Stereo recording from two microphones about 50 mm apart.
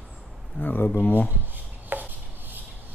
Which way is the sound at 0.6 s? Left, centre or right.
Left.